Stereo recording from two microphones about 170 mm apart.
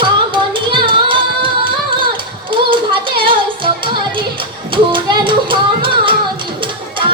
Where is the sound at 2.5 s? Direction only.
30° right (ahead or behind).